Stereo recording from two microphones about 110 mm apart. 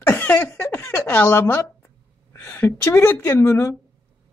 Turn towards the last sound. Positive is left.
turn(degrees=25)  # may be behind; listen again after turning